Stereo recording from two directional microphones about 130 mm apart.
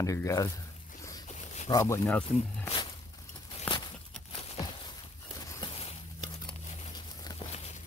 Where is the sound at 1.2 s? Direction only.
65° left (ahead or behind).